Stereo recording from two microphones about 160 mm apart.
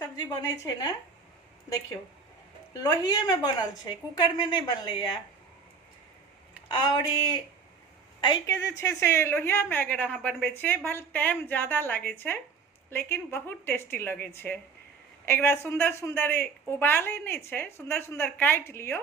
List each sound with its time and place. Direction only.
0.0 s a woman's voice: 20° left (ahead or behind)
2.8 s a woman's voice: 25° left (ahead or behind)
6.7 s a woman's voice: 25° left (ahead or behind)
15.3 s a woman's voice: 15° left (ahead or behind)